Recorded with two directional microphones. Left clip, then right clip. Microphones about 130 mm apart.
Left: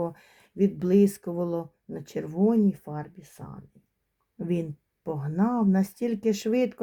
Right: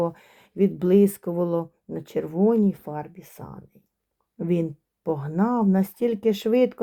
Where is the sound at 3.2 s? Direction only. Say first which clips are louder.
Right 4 dB; 45° right (ahead or behind).